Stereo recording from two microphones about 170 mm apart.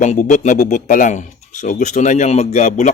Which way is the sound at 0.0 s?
45° left (ahead or behind).